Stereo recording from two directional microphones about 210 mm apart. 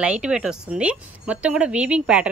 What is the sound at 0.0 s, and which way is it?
Speech, 5° right (ahead or behind).